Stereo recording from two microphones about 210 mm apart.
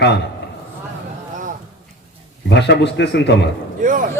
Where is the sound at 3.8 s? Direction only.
40° right (ahead or behind).